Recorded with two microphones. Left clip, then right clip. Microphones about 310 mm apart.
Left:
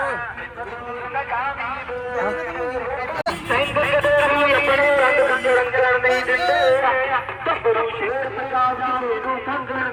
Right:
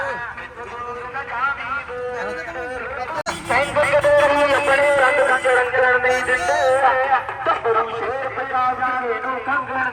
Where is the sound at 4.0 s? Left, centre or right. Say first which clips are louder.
Right 1 dB; right.